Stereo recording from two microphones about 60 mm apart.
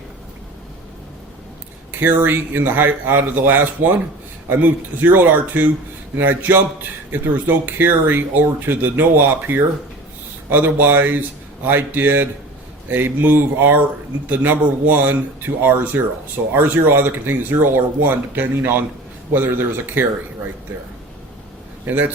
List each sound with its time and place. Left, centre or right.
1.9 s speech: right
21.8 s a man's voice: right